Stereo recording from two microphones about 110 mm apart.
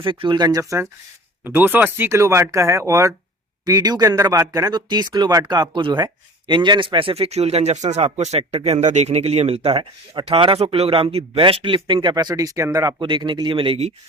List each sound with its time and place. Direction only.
0.0 s speech: 50° right (ahead or behind)
1.5 s speech: 15° right (ahead or behind); by 12.1 s 50° right (ahead or behind)
12.1 s speech: 35° right (ahead or behind)
13.0 s speech: 50° right (ahead or behind)